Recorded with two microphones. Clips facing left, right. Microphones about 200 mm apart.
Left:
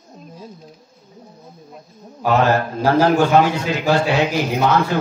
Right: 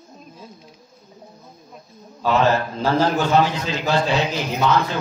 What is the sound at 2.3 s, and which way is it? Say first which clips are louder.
A man's voice: left 2 dB; 50° left (ahead or behind).